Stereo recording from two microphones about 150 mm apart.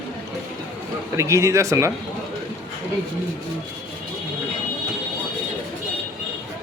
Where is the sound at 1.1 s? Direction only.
20° right (ahead or behind).